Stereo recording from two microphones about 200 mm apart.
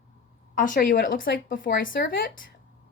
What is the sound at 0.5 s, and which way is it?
A woman's voice, 40° left (ahead or behind).